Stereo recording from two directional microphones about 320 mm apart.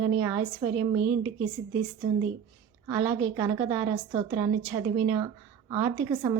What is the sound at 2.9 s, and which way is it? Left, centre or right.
A woman's voice, centre.